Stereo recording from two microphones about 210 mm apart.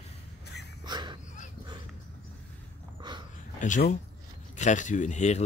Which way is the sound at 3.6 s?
35° left (ahead or behind).